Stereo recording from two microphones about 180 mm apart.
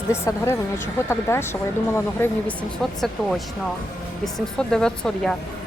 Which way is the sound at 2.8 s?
Centre (ahead or behind).